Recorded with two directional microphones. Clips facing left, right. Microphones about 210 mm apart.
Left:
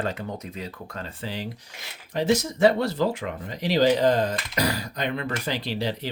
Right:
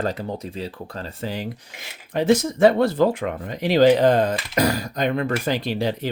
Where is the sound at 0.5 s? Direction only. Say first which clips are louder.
Right 4 dB; 30° right (ahead or behind).